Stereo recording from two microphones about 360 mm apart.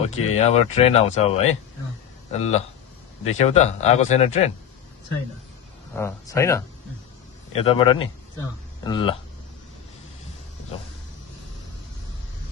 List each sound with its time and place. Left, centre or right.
0.1 s speech: centre
5.9 s speech: centre